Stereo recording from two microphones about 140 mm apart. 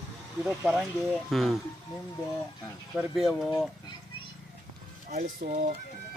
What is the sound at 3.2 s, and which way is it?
Speech, centre (ahead or behind).